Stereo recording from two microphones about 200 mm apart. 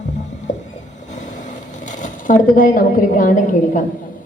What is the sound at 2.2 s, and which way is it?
A woman's voice, 40° left (ahead or behind).